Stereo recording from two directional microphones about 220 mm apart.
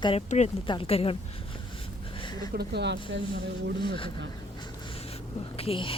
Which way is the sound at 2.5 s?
50° right (ahead or behind).